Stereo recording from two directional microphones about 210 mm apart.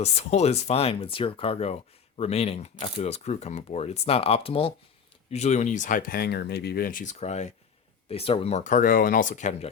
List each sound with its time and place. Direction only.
0.0 s speech: 30° left (ahead or behind)